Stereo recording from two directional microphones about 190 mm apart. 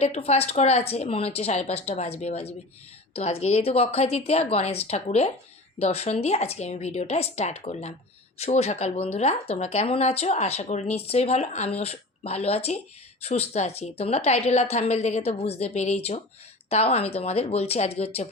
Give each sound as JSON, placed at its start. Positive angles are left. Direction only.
{"t": 0.0, "sound": "speech", "side_deg": 35}